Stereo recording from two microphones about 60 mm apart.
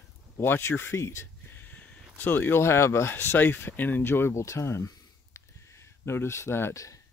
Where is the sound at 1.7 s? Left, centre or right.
Left.